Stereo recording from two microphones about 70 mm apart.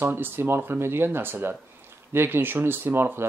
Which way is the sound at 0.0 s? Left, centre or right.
Right.